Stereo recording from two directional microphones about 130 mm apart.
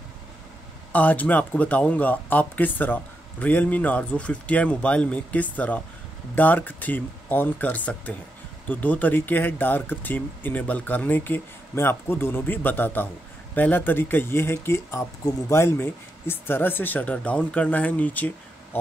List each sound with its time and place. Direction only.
0.9 s speech: 10° left (ahead or behind)